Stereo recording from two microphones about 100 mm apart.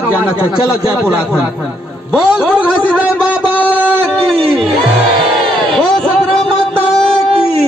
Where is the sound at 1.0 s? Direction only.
10° right (ahead or behind).